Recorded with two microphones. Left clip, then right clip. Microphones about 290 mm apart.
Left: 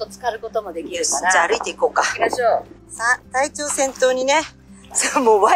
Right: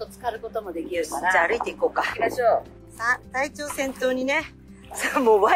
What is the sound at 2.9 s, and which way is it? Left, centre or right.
A woman's voice, centre.